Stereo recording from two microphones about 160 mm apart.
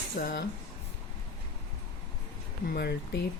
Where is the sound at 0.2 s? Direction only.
65° left (ahead or behind).